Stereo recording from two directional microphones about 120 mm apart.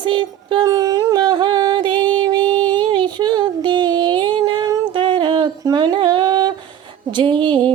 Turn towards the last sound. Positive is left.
turn(degrees=-40)  # may be behind; listen again after turning